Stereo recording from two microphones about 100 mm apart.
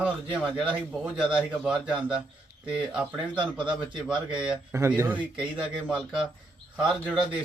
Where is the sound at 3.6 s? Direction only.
50° right (ahead or behind).